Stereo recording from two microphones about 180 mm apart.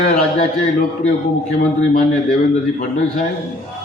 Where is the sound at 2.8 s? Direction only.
45° left (ahead or behind).